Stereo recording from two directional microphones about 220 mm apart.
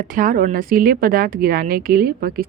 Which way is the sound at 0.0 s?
35° right (ahead or behind).